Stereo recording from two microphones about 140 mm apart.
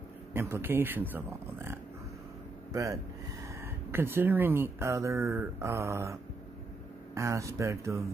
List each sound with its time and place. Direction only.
0.3 s speech: 15° right (ahead or behind)
7.2 s speech: 20° right (ahead or behind)